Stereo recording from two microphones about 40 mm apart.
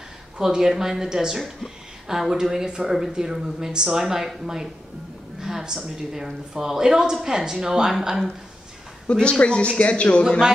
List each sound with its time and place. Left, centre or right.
0.4 s a woman's voice: centre
9.1 s speech: left